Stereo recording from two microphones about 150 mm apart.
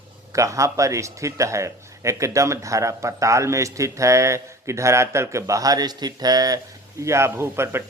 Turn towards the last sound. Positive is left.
turn(degrees=-15)  # may be behind; listen again after turning